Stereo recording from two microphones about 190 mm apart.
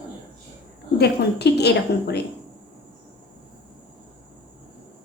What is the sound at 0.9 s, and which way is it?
A woman's voice, 60° left (ahead or behind).